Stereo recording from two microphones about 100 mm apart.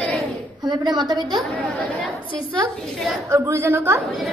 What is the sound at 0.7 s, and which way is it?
Speech, 45° right (ahead or behind).